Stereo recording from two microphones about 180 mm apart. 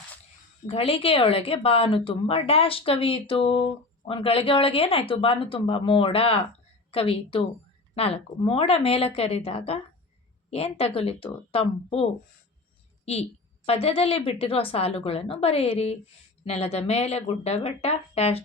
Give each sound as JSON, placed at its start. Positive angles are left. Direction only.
{"t": 0.7, "sound": "speech", "side_deg": 30}
{"t": 13.7, "sound": "speech", "side_deg": 35}